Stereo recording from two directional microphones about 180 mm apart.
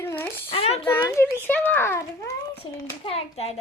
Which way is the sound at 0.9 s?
15° left (ahead or behind).